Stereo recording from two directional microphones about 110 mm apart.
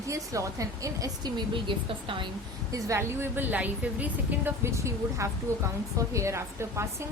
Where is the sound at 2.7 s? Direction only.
25° right (ahead or behind).